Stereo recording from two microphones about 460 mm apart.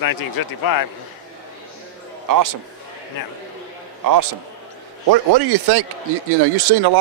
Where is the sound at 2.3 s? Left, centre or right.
Right.